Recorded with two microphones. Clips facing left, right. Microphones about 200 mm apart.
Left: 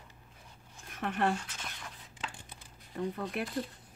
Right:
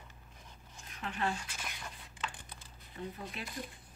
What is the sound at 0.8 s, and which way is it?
Speech, 55° left (ahead or behind).